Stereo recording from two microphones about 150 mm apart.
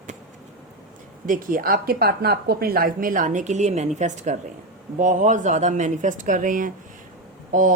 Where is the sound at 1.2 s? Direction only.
65° right (ahead or behind).